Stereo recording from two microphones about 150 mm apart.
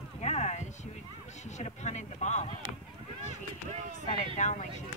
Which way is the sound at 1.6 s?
50° left (ahead or behind).